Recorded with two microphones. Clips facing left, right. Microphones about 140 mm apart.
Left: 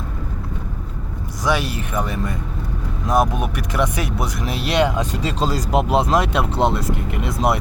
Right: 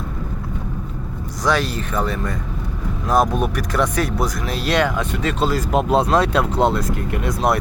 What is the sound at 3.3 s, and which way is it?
Speech, 15° left (ahead or behind).